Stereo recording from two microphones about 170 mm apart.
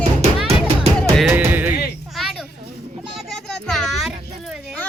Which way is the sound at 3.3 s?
5° left (ahead or behind).